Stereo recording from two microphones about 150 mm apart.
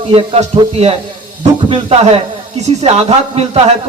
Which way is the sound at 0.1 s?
40° right (ahead or behind).